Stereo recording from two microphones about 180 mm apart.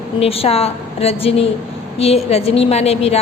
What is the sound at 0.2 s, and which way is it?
A woman's voice, 35° left (ahead or behind).